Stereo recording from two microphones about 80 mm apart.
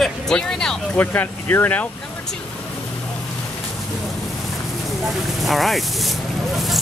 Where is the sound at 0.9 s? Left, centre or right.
Left.